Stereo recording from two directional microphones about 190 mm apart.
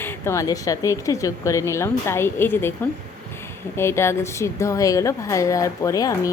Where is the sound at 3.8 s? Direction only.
15° left (ahead or behind).